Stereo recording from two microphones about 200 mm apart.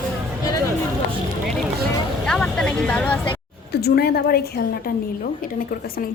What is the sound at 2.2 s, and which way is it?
Speech, 5° left (ahead or behind).